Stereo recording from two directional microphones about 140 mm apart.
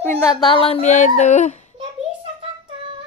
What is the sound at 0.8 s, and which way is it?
Speech, 60° left (ahead or behind).